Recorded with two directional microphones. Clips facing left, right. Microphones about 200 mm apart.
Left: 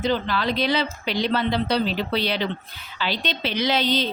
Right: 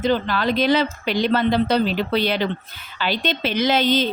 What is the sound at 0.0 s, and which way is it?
A woman's voice, 50° right (ahead or behind).